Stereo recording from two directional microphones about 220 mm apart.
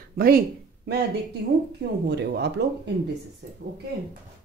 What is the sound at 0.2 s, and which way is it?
Speech, 45° right (ahead or behind).